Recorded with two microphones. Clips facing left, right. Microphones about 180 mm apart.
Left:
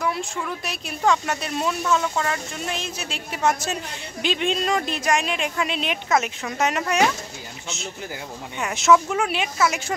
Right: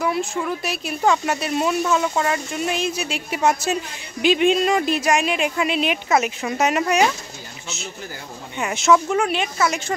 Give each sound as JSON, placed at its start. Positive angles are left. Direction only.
{"t": 0.0, "sound": "a woman's voice", "side_deg": -5}
{"t": 8.5, "sound": "speech", "side_deg": 0}